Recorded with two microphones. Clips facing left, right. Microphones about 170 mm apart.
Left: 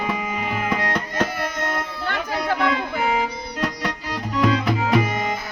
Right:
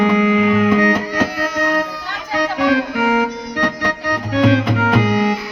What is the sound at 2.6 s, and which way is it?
Music, 75° right (ahead or behind).